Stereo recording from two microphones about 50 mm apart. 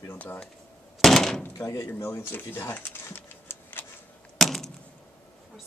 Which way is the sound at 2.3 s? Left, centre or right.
Left.